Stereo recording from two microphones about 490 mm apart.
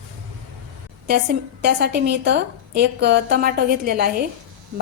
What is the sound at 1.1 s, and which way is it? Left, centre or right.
A woman's voice, centre.